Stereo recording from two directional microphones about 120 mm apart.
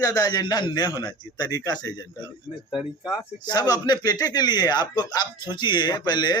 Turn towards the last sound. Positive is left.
turn(degrees=40)  # may be behind; listen again after turning